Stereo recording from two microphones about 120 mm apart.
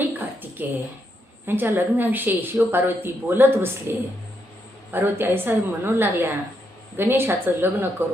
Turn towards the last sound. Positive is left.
turn(degrees=-20)  # may be behind; listen again after turning